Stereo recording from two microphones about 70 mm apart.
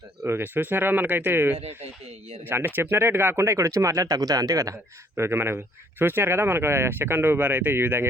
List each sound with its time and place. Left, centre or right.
0.3 s speech: right